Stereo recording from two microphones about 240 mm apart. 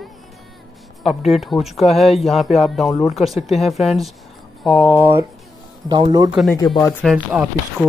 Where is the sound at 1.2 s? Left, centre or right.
Centre.